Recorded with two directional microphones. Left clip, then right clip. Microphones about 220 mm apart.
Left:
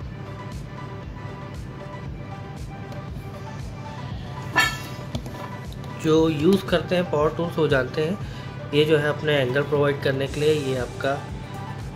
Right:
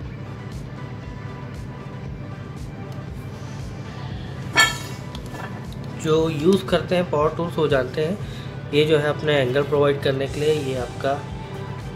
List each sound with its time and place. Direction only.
6.0 s speech: 10° left (ahead or behind)